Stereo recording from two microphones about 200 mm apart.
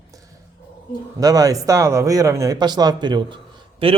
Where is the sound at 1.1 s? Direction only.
15° right (ahead or behind).